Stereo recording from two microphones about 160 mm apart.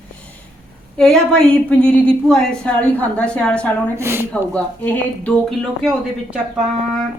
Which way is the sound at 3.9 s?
15° right (ahead or behind).